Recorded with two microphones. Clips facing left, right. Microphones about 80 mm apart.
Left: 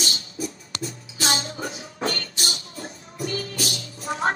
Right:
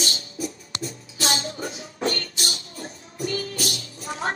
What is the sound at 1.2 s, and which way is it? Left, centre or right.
Music, left.